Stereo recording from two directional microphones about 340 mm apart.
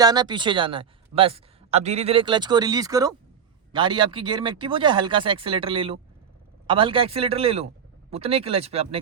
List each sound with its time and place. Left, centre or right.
0.0 s speech: centre